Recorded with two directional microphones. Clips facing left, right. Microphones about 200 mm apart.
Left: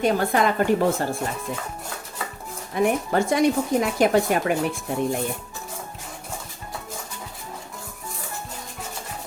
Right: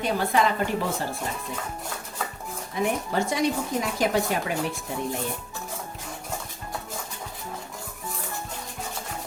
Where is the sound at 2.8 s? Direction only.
55° left (ahead or behind).